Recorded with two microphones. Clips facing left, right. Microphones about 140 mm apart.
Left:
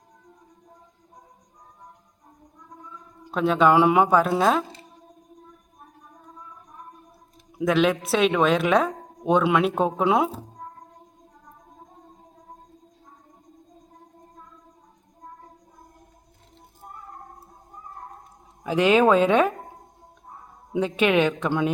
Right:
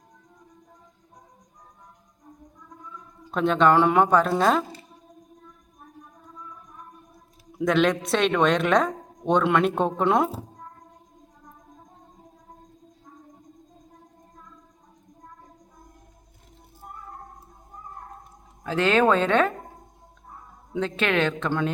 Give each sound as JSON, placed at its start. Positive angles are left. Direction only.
{"t": 3.3, "sound": "speech", "side_deg": 5}
{"t": 7.6, "sound": "a woman's voice", "side_deg": 5}
{"t": 18.6, "sound": "speech", "side_deg": 15}
{"t": 20.7, "sound": "speech", "side_deg": 10}